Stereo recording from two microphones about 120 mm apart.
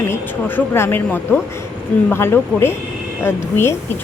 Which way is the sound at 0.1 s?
20° left (ahead or behind).